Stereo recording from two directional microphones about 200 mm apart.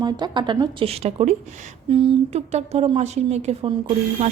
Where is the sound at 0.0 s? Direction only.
20° right (ahead or behind).